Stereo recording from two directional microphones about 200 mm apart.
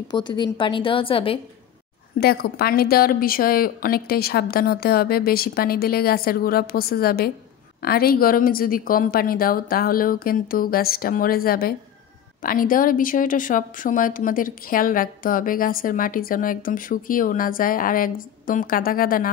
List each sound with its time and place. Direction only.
0.1 s a woman's voice: 20° left (ahead or behind)
2.1 s a woman's voice: 50° left (ahead or behind)